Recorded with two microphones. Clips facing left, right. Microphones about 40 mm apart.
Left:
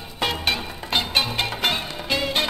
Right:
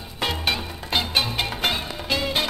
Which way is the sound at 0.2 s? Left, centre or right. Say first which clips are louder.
Left 1 dB; centre.